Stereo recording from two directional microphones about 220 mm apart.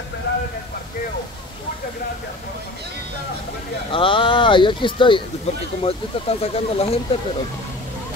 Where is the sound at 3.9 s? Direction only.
25° left (ahead or behind).